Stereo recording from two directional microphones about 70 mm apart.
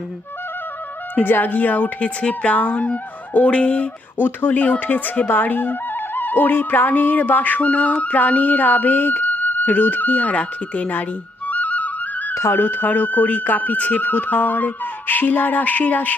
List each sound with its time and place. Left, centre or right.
1.1 s speech: left
11.4 s music: left
12.3 s music: left
12.5 s speech: left